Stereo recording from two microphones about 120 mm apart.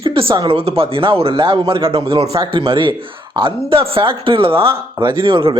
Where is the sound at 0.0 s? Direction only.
50° right (ahead or behind).